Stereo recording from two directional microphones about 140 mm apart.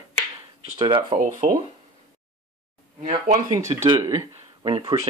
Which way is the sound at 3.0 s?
65° right (ahead or behind).